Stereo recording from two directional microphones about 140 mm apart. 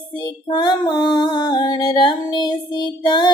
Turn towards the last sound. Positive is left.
turn(degrees=35)  # may be behind; listen again after turning